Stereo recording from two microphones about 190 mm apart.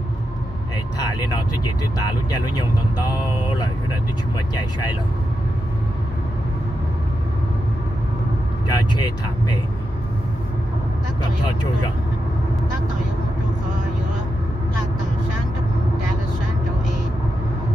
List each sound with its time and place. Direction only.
0.9 s speech: 20° left (ahead or behind)
8.6 s speech: 20° left (ahead or behind)